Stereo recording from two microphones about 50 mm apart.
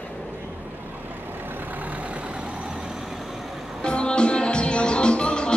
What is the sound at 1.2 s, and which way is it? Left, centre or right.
Vehicle, right.